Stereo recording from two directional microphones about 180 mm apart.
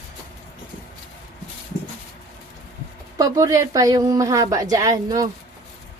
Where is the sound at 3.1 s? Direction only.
20° right (ahead or behind).